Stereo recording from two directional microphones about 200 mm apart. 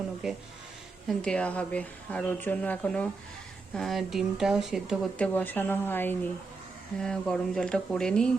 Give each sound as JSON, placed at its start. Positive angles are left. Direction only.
{"t": 0.2, "sound": "speech", "side_deg": 0}